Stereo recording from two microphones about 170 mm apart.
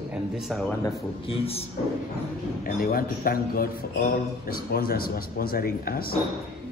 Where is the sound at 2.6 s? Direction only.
60° left (ahead or behind).